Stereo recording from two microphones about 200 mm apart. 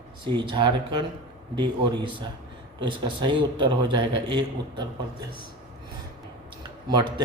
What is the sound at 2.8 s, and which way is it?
A man's voice, 25° right (ahead or behind).